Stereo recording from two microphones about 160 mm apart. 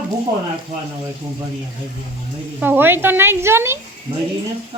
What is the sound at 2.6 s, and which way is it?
Speech, 10° right (ahead or behind).